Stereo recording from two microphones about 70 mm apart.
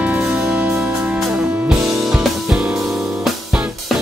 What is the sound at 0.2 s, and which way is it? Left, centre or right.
Music, centre.